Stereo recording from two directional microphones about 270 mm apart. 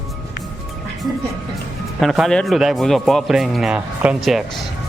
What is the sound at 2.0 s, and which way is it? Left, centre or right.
A man's voice, centre.